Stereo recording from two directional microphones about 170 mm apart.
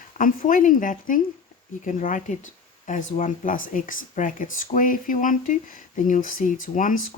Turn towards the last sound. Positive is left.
turn(degrees=50)  # may be behind; listen again after turning